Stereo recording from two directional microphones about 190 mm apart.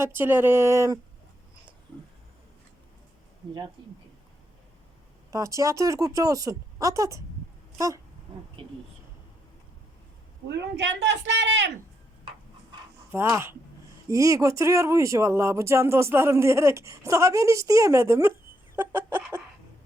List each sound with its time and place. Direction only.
0.0 s speech: 10° right (ahead or behind)
3.8 s speech: 25° right (ahead or behind)
5.3 s speech: 15° right (ahead or behind)
8.6 s speech: 25° right (ahead or behind)
10.5 s a woman's voice: 65° right (ahead or behind)
13.1 s speech: 15° right (ahead or behind)
18.8 s chicken: 10° right (ahead or behind)